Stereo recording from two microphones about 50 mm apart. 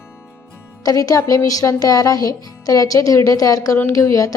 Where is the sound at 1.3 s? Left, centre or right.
Left.